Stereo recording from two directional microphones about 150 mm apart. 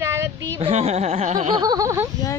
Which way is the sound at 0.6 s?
45° right (ahead or behind).